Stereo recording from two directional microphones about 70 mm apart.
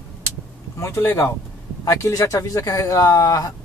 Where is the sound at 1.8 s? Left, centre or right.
Left.